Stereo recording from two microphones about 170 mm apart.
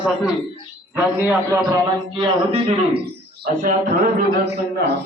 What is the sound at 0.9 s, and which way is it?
Speech, 15° right (ahead or behind).